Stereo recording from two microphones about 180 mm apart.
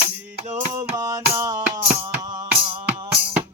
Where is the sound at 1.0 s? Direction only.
20° right (ahead or behind).